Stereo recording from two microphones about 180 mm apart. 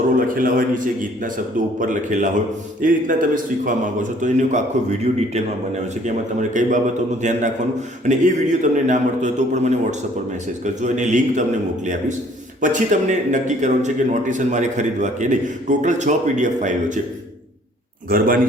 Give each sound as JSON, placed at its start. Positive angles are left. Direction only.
{"t": 0.2, "sound": "a man's voice", "side_deg": -50}
{"t": 12.6, "sound": "a man's voice", "side_deg": -45}